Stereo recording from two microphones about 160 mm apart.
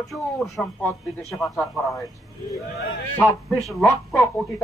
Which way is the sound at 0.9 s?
20° left (ahead or behind).